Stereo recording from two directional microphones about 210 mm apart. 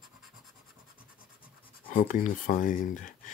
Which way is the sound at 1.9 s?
40° left (ahead or behind).